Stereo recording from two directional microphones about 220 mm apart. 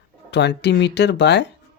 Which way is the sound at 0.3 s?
50° left (ahead or behind).